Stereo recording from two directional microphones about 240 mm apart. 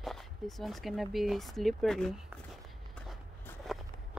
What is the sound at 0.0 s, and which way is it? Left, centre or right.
A woman's voice, centre.